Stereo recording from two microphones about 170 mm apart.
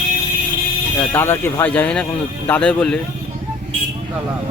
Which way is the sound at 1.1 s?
15° left (ahead or behind).